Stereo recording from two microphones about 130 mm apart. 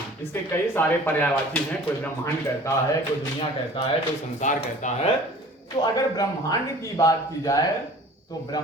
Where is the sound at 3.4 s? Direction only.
45° left (ahead or behind).